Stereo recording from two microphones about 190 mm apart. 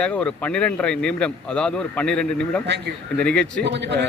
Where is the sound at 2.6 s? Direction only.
65° right (ahead or behind).